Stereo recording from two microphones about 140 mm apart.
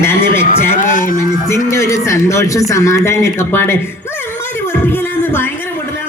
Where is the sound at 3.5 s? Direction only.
15° left (ahead or behind).